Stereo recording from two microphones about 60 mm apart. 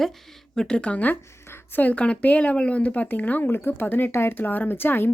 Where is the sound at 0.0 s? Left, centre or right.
Centre; by 1.1 s left.